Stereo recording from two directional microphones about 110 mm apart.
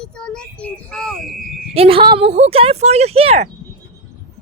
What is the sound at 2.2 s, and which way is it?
Speech, 70° right (ahead or behind).